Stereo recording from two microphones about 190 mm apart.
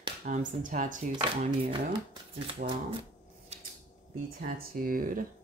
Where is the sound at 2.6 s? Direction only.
50° right (ahead or behind).